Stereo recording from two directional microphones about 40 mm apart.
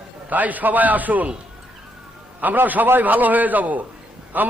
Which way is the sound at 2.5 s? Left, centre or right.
Right.